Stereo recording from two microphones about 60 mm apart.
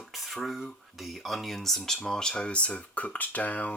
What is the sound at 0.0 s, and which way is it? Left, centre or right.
Speech, centre.